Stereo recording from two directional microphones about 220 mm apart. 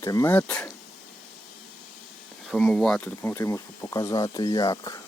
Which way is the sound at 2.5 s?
5° left (ahead or behind).